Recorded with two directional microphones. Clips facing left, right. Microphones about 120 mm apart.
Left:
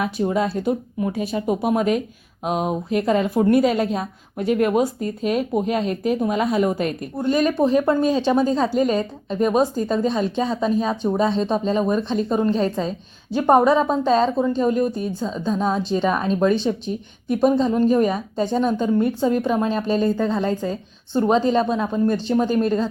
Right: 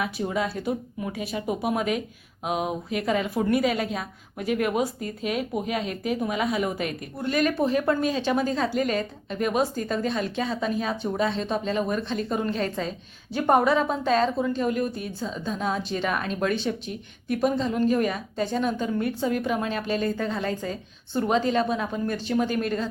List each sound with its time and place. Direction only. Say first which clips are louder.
0.0 s a woman's voice: left 6 dB; 30° left (ahead or behind)